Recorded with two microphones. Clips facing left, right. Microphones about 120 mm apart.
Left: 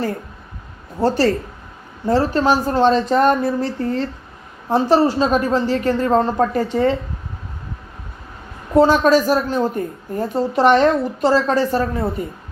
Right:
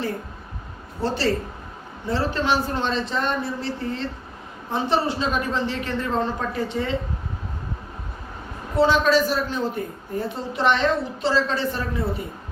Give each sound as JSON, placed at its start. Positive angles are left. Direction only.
{"t": 0.9, "sound": "a woman's voice", "side_deg": 45}
{"t": 4.7, "sound": "a woman's voice", "side_deg": 40}
{"t": 8.7, "sound": "a woman's voice", "side_deg": 45}